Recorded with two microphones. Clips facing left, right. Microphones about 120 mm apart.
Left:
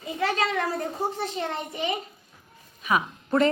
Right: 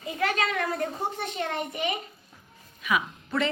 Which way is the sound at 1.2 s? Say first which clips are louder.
Left 1 dB; 30° left (ahead or behind).